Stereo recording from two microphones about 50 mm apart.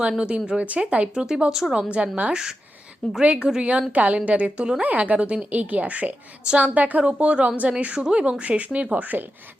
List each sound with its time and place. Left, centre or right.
0.2 s a woman's voice: right
1.9 s a woman's voice: right
2.3 s a woman's voice: centre; by 9.2 s right